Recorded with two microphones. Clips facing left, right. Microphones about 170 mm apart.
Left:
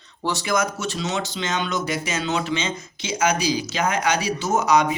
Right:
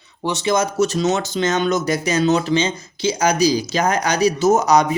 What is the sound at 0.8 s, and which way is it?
Speech, 45° right (ahead or behind).